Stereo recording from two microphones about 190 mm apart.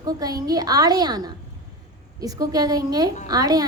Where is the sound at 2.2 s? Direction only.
20° right (ahead or behind).